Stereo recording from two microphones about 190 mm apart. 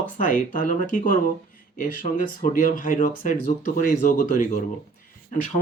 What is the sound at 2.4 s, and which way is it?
Speech, 45° left (ahead or behind).